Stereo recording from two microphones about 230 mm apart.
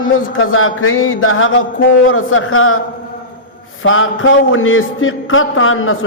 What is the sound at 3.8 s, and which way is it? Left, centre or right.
A man's voice, left.